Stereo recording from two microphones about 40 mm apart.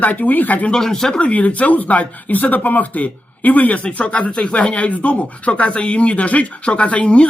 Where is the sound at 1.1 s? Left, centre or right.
Left.